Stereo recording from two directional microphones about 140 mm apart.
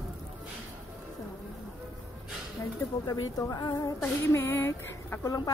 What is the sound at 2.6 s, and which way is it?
Speech, 25° left (ahead or behind).